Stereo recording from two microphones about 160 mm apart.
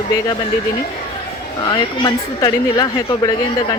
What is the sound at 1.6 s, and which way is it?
Speech, 25° left (ahead or behind).